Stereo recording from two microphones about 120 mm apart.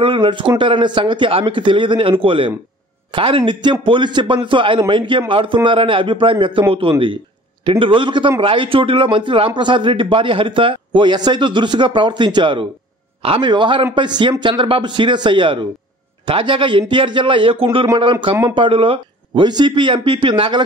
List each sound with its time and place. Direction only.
0.0 s a man's voice: 45° right (ahead or behind)
13.2 s speech: 55° right (ahead or behind)
13.5 s a man's voice: 40° right (ahead or behind)